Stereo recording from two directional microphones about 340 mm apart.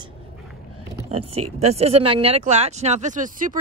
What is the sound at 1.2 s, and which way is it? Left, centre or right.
Speech, right.